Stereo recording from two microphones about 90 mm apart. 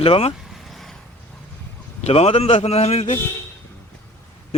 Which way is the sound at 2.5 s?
90° left.